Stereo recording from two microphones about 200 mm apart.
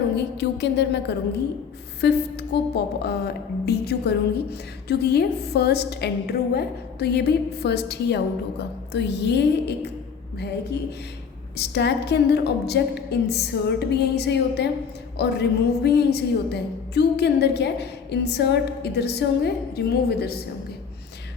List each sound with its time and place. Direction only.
0.3 s a woman's voice: 60° left (ahead or behind)